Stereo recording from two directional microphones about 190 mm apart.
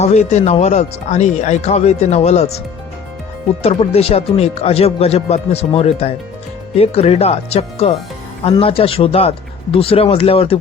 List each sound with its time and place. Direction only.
0.0 s speech: 35° left (ahead or behind)
3.6 s speech: 30° left (ahead or behind)